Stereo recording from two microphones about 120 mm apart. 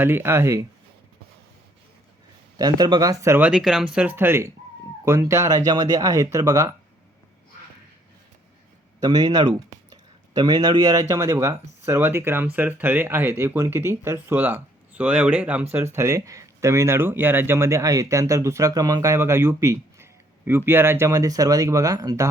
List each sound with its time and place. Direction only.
0.0 s speech: 20° right (ahead or behind)
2.6 s speech: 35° right (ahead or behind)
3.5 s speech: 5° right (ahead or behind); by 6.7 s 25° right (ahead or behind)
9.0 s speech: 30° right (ahead or behind)